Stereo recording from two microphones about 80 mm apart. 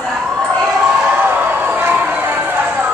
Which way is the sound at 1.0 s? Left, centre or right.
Right.